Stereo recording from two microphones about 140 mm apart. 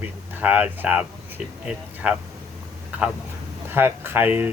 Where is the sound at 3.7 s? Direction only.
15° right (ahead or behind).